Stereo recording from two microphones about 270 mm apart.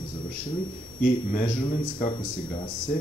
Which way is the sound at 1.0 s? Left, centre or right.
Left.